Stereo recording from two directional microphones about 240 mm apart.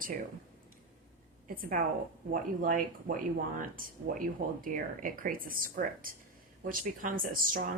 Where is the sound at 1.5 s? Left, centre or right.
Right.